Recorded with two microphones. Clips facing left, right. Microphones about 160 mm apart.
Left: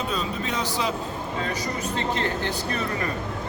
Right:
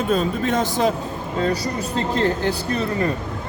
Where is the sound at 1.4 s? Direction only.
35° right (ahead or behind).